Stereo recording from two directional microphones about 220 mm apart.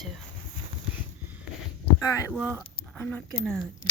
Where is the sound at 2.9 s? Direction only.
5° left (ahead or behind).